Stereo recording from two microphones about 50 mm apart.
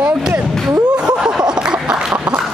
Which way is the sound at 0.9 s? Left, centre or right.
Centre.